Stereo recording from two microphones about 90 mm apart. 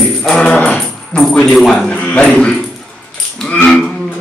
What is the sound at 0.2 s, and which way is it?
Music, 5° left (ahead or behind).